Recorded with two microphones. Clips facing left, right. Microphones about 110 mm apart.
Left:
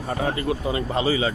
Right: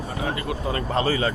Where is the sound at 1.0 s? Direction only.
10° left (ahead or behind).